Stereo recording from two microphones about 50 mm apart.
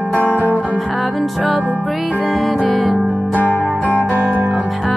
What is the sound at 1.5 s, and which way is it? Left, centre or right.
Music, right.